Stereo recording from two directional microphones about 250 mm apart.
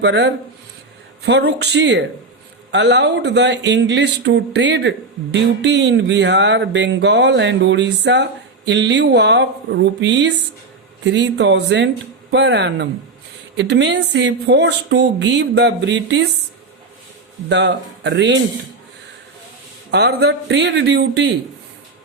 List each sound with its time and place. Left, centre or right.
0.0 s speech: right
17.5 s speech: right
19.9 s speech: right